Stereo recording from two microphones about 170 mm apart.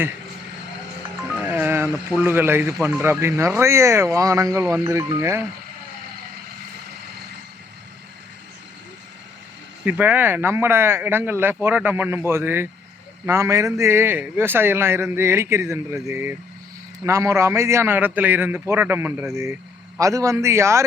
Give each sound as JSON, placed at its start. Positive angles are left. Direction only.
{"t": 1.4, "sound": "a sound", "side_deg": -10}
{"t": 2.8, "sound": "a man's voice", "side_deg": -15}
{"t": 9.8, "sound": "a man's voice", "side_deg": -10}